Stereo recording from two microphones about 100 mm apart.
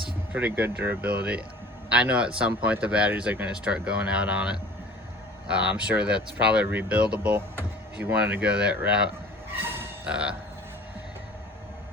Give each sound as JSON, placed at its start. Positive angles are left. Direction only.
{"t": 0.3, "sound": "speech", "side_deg": -20}
{"t": 9.6, "sound": "a sound", "side_deg": -20}
{"t": 10.1, "sound": "speech", "side_deg": -10}